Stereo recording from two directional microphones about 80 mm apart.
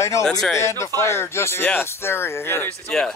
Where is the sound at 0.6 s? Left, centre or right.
Left.